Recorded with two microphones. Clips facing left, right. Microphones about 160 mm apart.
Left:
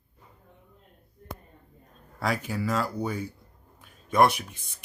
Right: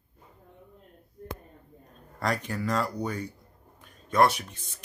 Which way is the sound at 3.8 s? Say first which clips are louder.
Left 1 dB; 10° left (ahead or behind).